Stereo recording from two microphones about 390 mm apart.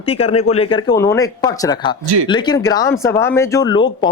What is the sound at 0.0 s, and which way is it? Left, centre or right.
A man's voice, centre.